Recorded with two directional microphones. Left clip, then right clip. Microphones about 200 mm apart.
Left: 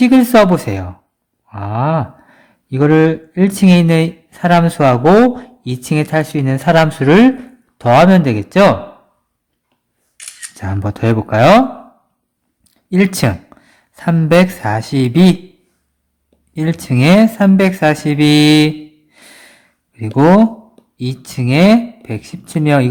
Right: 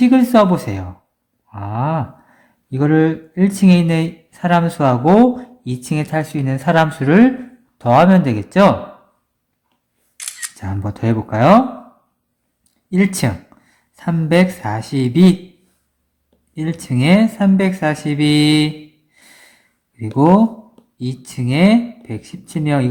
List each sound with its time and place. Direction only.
0.0 s speech: 25° left (ahead or behind)
10.2 s single-lens reflex camera: 15° right (ahead or behind)
10.5 s speech: 25° left (ahead or behind)
12.6 s speech: 25° left (ahead or behind)
16.6 s speech: 30° left (ahead or behind)
19.1 s a sound: 25° left (ahead or behind)
20.1 s speech: 25° left (ahead or behind)